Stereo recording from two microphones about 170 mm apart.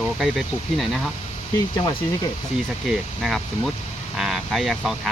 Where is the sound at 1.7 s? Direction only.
25° left (ahead or behind).